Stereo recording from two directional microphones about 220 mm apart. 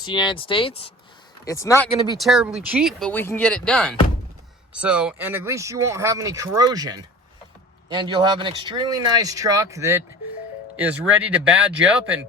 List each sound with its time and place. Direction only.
0.0 s speech: 20° left (ahead or behind)
2.1 s speech: centre (ahead or behind)